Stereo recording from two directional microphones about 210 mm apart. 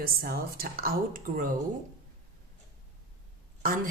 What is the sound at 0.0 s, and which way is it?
Speech, 45° right (ahead or behind).